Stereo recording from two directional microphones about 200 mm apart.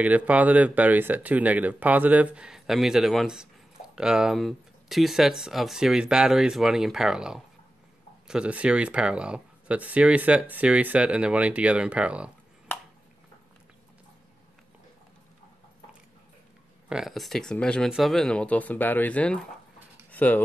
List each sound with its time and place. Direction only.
0.0 s speech: 5° right (ahead or behind)
16.9 s speech: centre (ahead or behind)